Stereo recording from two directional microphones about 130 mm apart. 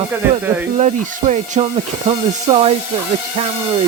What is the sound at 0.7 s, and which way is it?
Speech, 60° right (ahead or behind).